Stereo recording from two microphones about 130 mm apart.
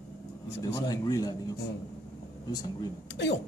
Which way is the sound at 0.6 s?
30° left (ahead or behind).